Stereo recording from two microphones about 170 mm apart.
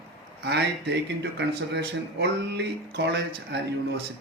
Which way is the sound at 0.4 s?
85° right.